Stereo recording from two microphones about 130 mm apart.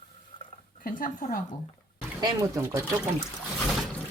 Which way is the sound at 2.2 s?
25° right (ahead or behind).